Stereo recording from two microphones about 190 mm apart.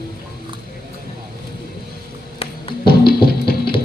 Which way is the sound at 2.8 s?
55° left (ahead or behind).